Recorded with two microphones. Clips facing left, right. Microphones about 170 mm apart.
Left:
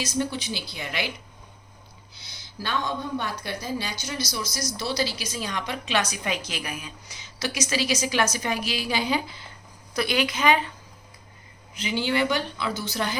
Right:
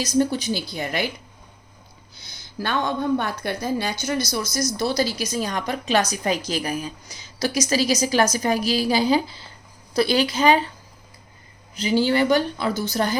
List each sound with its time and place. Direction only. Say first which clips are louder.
0.0 s a woman's voice: right 7 dB; 40° right (ahead or behind)
2.1 s a woman's voice: right 7 dB; 45° right (ahead or behind)
11.7 s a woman's voice: right 6 dB; 35° right (ahead or behind)